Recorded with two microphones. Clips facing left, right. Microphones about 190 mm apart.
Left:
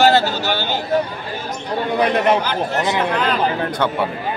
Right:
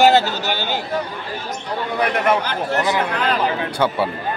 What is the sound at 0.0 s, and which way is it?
Speech, 15° right (ahead or behind).